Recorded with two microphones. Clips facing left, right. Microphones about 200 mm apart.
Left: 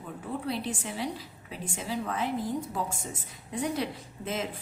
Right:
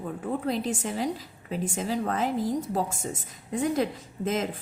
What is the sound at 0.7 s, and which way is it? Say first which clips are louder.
A woman's voice: right 5 dB; 40° right (ahead or behind).